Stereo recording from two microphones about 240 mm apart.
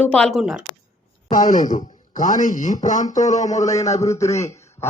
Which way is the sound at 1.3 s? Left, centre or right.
Left.